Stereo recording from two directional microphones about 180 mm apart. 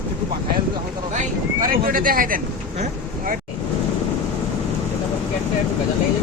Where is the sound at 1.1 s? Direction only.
50° right (ahead or behind).